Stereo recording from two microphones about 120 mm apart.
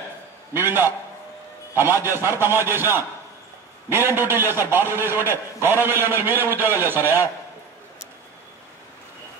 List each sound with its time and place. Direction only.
0.5 s a man's voice: 20° right (ahead or behind)